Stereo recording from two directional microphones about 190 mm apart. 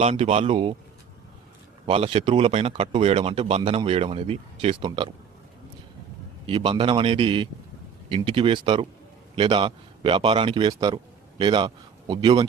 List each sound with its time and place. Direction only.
0.0 s speech: 35° right (ahead or behind)
1.9 s speech: 30° right (ahead or behind)
6.4 s a man's voice: 30° right (ahead or behind)